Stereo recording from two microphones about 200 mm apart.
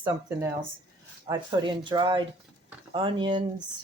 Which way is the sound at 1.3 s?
20° right (ahead or behind).